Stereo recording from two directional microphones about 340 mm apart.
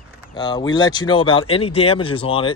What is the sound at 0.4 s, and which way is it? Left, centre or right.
Speech, centre.